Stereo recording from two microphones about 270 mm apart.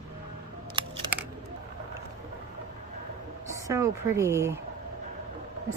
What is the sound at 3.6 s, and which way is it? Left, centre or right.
Speech, centre.